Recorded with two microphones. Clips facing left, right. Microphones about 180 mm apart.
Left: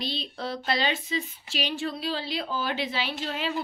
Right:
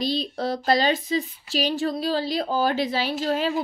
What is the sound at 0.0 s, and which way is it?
A woman's voice, 40° right (ahead or behind).